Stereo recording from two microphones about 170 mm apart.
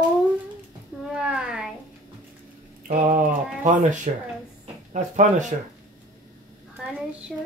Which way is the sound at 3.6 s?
45° right (ahead or behind).